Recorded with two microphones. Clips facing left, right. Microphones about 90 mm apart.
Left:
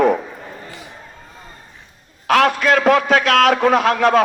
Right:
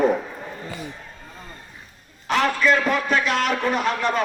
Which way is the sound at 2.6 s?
85° left.